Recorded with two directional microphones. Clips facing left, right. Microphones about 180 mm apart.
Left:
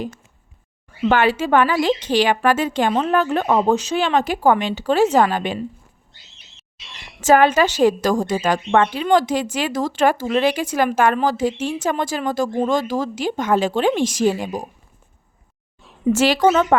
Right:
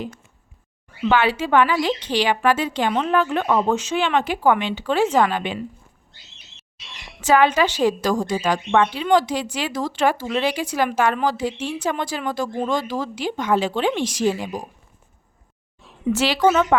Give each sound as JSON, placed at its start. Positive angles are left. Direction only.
{"t": 1.0, "sound": "a woman's voice", "side_deg": 45}
{"t": 7.2, "sound": "a woman's voice", "side_deg": 45}
{"t": 16.1, "sound": "a woman's voice", "side_deg": 45}